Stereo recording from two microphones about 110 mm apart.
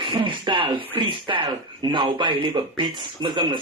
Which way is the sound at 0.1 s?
50° right (ahead or behind).